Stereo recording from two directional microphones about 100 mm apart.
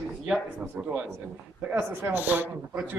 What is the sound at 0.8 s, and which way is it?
Speech, 15° right (ahead or behind).